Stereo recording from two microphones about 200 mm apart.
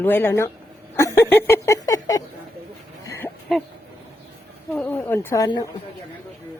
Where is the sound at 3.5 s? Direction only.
Centre (ahead or behind).